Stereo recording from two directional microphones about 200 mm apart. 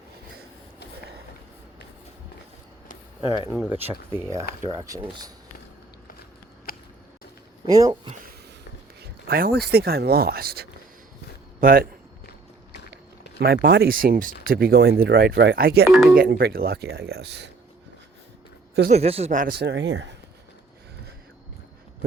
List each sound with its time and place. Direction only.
3.2 s speech: 20° right (ahead or behind)
7.7 s speech: 20° right (ahead or behind)
9.0 s a sound: 50° right (ahead or behind)
9.7 s speech: 50° right (ahead or behind)
13.4 s speech: 55° right (ahead or behind)
15.9 s speech: 5° right (ahead or behind)
16.1 s speech: 45° right (ahead or behind)
18.9 s speech: 30° right (ahead or behind); by 20.1 s 60° right (ahead or behind)